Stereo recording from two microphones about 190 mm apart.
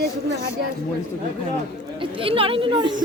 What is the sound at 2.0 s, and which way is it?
Speech, 30° right (ahead or behind).